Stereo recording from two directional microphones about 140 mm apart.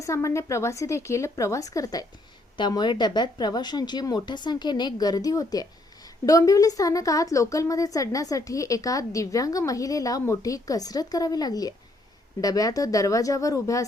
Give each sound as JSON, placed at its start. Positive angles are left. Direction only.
{"t": 0.0, "sound": "a woman's voice", "side_deg": 20}